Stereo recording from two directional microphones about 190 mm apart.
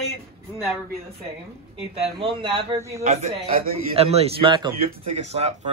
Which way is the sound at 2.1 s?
25° right (ahead or behind).